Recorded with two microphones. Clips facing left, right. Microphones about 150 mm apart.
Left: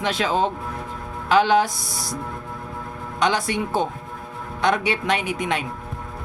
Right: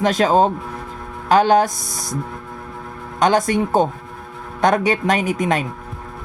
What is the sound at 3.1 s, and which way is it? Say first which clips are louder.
Speech: right 6 dB; 45° right (ahead or behind).